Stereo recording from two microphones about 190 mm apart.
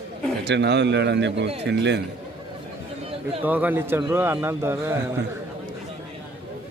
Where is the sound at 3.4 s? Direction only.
10° right (ahead or behind).